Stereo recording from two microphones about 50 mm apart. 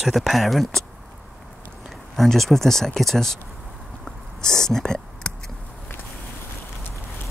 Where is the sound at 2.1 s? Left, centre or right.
Centre.